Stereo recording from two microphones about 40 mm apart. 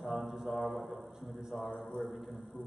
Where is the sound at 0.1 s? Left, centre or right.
Centre.